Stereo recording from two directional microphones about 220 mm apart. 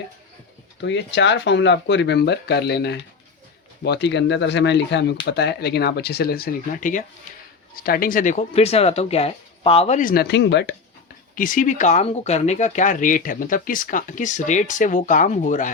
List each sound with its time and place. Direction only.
0.8 s speech: 55° left (ahead or behind)
11.3 s speech: 40° left (ahead or behind)